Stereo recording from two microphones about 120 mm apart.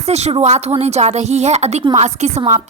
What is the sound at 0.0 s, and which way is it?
A woman's voice, 65° right (ahead or behind).